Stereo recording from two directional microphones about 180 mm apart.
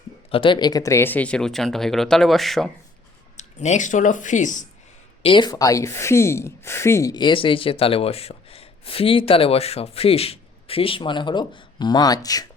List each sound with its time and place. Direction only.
0.3 s speech: 30° left (ahead or behind); by 2.6 s centre (ahead or behind)
3.3 s speech: 40° left (ahead or behind)
5.2 s speech: 25° left (ahead or behind)